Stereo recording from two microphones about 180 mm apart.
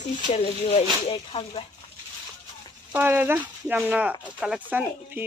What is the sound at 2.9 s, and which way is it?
Speech, 10° right (ahead or behind).